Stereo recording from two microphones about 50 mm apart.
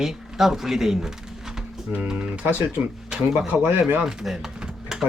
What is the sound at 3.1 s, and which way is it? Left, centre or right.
Speech, centre.